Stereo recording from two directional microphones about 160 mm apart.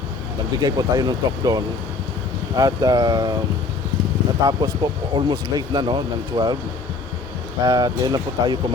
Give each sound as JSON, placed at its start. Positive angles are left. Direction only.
{"t": 0.6, "sound": "speech", "side_deg": -25}
{"t": 4.4, "sound": "speech", "side_deg": -30}
{"t": 7.6, "sound": "speech", "side_deg": -20}